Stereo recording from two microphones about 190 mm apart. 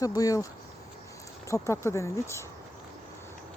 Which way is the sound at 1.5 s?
15° left (ahead or behind).